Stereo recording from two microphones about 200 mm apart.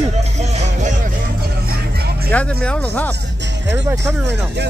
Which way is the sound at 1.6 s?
50° right (ahead or behind).